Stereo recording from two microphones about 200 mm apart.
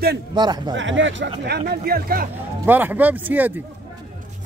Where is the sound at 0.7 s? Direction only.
70° right (ahead or behind).